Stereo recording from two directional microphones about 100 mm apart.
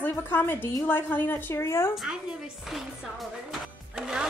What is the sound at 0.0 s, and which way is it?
A woman's voice, 20° left (ahead or behind).